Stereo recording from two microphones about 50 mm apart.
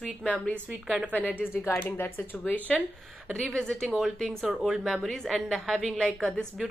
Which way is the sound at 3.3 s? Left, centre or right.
Centre.